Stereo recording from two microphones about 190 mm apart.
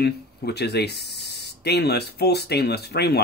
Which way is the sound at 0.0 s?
60° left (ahead or behind).